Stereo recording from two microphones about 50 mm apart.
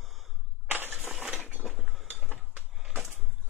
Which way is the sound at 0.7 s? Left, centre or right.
Right.